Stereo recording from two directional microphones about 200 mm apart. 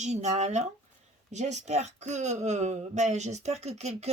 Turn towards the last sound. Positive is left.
turn(degrees=-35)  # may be behind; listen again after turning